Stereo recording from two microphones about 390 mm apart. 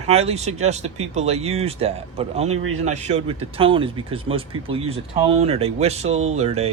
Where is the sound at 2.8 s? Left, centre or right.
Centre.